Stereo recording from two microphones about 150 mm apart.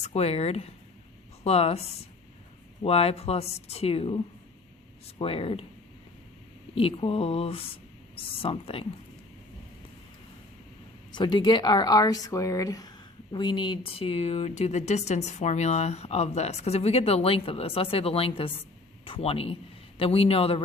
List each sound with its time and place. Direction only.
0.0 s speech: 45° left (ahead or behind)
2.8 s speech: 40° left (ahead or behind)
6.7 s speech: 40° left (ahead or behind)
11.1 s speech: 30° left (ahead or behind)